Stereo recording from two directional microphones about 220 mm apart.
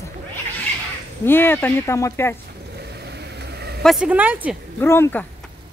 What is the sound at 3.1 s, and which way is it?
Vehicle, 50° right (ahead or behind).